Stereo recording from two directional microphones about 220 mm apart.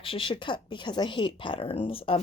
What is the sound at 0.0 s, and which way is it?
Speech, 25° left (ahead or behind).